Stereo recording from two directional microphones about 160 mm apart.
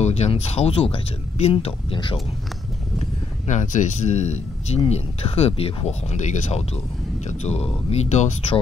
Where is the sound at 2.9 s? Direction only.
50° left (ahead or behind).